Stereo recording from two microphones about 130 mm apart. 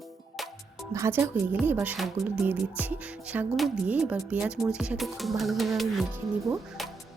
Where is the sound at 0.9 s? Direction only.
20° right (ahead or behind).